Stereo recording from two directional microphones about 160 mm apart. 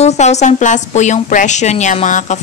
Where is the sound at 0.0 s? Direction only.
45° left (ahead or behind).